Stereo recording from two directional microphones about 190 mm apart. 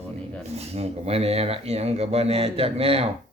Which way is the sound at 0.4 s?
35° right (ahead or behind).